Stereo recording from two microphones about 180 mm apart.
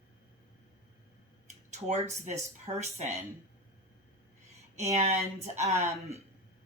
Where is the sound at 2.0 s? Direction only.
40° right (ahead or behind).